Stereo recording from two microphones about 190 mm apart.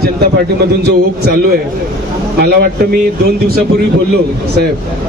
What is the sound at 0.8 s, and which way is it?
Speech, 60° right (ahead or behind).